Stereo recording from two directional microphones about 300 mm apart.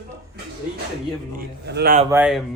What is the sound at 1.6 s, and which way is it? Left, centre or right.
Speech, right.